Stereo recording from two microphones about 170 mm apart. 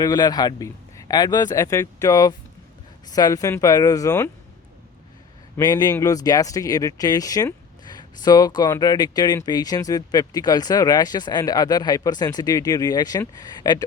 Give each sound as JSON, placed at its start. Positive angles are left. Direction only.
{"t": 0.0, "sound": "speech", "side_deg": 25}
{"t": 5.5, "sound": "speech", "side_deg": 25}